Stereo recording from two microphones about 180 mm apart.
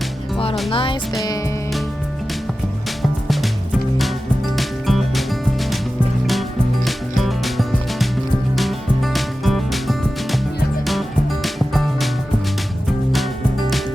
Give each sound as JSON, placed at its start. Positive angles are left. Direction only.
{"t": 0.7, "sound": "music", "side_deg": 30}
{"t": 3.0, "sound": "music", "side_deg": 0}
{"t": 4.5, "sound": "music", "side_deg": 0}
{"t": 7.2, "sound": "music", "side_deg": 0}
{"t": 11.4, "sound": "music", "side_deg": 0}